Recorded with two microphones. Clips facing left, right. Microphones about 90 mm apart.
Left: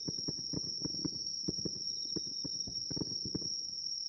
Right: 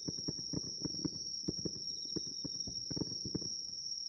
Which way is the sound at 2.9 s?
15° left (ahead or behind).